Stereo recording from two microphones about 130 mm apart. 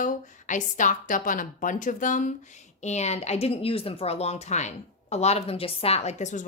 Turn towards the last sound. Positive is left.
turn(degrees=65)  # may be behind; listen again after turning